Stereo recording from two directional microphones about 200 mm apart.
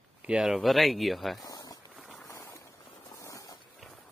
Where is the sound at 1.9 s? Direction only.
Centre (ahead or behind).